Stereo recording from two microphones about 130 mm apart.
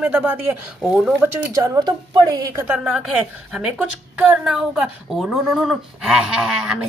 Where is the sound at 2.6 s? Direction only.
10° right (ahead or behind).